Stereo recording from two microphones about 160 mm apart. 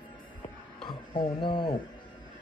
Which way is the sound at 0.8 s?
30° left (ahead or behind).